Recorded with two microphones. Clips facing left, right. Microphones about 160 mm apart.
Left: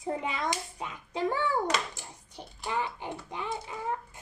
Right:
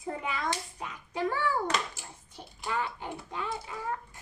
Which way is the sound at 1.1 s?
20° left (ahead or behind).